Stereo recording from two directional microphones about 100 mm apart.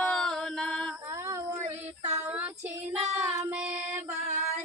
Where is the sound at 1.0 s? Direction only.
35° right (ahead or behind).